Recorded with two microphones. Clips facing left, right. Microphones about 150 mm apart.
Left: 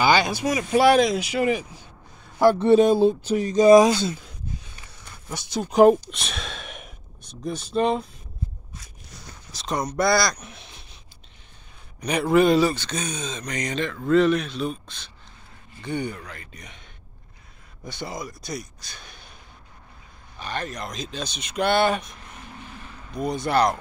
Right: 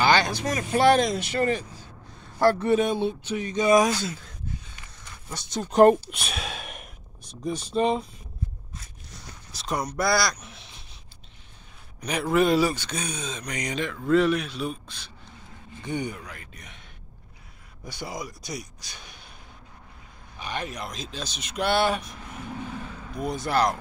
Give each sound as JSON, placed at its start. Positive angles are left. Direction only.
{"t": 0.0, "sound": "speech", "side_deg": 10}
{"t": 2.6, "sound": "speech", "side_deg": 30}
{"t": 5.3, "sound": "speech", "side_deg": 5}
{"t": 9.5, "sound": "speech", "side_deg": -5}
{"t": 12.0, "sound": "speech", "side_deg": 0}
{"t": 17.8, "sound": "speech", "side_deg": -10}
{"t": 20.3, "sound": "speech", "side_deg": -10}
{"t": 23.1, "sound": "speech", "side_deg": -5}